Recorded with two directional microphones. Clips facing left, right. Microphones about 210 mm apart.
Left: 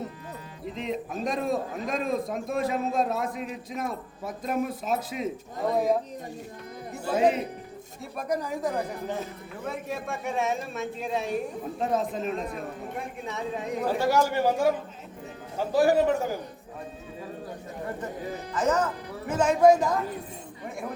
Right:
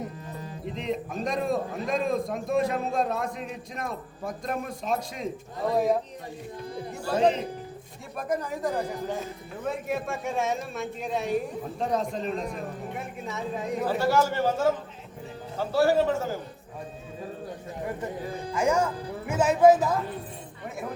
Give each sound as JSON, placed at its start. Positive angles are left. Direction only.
{"t": 0.6, "sound": "a man's voice", "side_deg": 0}
{"t": 7.1, "sound": "a man's voice", "side_deg": 5}
{"t": 14.0, "sound": "a man's voice", "side_deg": 15}
{"t": 18.5, "sound": "a woman's voice", "side_deg": -10}